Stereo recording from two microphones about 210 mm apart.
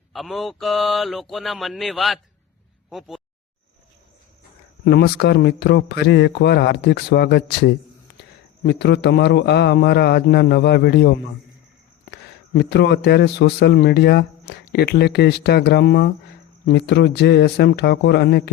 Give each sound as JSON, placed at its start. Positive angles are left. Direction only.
{"t": 0.1, "sound": "speech", "side_deg": 0}
{"t": 4.9, "sound": "a man's voice", "side_deg": 50}
{"t": 12.1, "sound": "a man's voice", "side_deg": 55}